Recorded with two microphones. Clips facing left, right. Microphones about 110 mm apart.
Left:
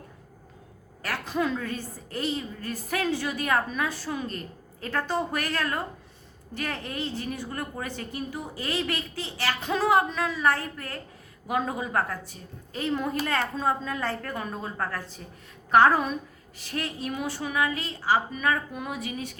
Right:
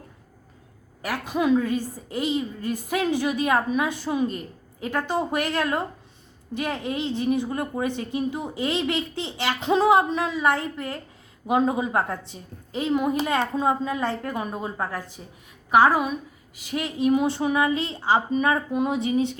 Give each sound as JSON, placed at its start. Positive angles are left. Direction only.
{"t": 1.0, "sound": "a woman's voice", "side_deg": -15}